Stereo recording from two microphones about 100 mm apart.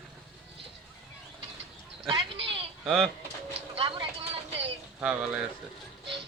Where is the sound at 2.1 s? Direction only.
60° right (ahead or behind).